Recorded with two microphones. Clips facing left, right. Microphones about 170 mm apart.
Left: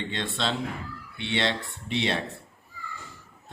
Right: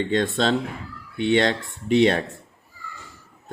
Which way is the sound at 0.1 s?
45° right (ahead or behind).